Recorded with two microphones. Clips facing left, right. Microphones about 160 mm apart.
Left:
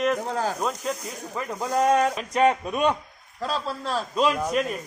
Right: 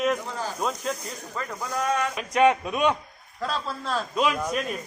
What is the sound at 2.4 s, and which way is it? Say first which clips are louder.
Speech: even; centre (ahead or behind).